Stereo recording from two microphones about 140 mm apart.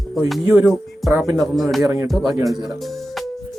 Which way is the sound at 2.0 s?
Centre (ahead or behind).